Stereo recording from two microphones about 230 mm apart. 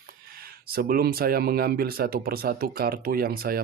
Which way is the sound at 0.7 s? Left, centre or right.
Right.